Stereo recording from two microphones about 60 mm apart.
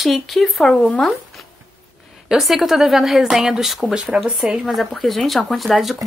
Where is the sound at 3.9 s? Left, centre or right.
Centre.